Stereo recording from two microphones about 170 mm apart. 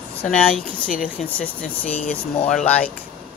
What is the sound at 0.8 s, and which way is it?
Speech, 55° left (ahead or behind).